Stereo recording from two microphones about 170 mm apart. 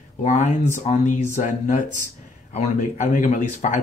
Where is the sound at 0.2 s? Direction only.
45° left (ahead or behind).